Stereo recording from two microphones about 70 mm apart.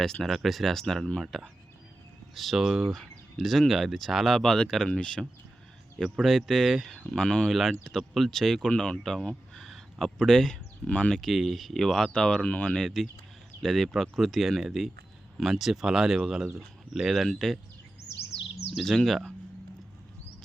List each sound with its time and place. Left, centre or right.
0.0 s speech: centre
2.3 s speech: centre
6.0 s speech: centre
7.1 s speech: centre
10.8 s speech: centre
11.1 s speech: centre
12.8 s speech: centre
18.7 s speech: centre